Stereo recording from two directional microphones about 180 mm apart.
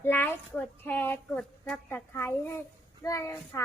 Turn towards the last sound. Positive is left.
turn(degrees=15)  # may be behind; listen again after turning